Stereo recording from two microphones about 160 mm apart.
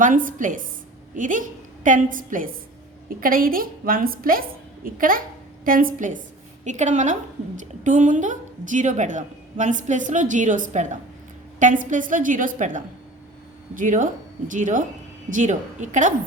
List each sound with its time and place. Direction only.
0.0 s a woman's voice: 55° right (ahead or behind)